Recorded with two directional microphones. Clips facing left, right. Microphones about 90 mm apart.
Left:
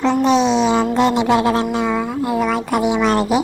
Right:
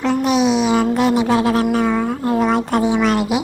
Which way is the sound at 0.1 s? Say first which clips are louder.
Even; 30° left (ahead or behind).